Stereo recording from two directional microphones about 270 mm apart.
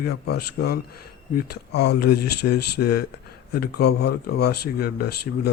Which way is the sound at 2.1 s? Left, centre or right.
Left.